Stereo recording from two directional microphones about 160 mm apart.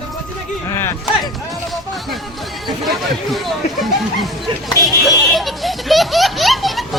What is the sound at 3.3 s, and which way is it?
Baby laughter, centre (ahead or behind).